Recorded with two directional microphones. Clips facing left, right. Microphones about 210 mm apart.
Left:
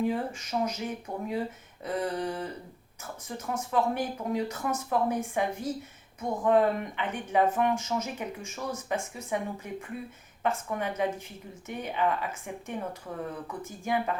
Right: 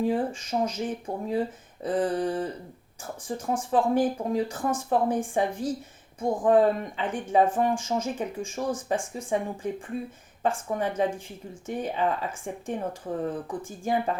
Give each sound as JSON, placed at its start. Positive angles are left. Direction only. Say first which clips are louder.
{"t": 0.0, "sound": "speech", "louder": "right 3 dB", "side_deg": -30}